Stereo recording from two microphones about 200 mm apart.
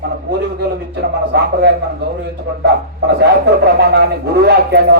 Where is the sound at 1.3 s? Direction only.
55° right (ahead or behind).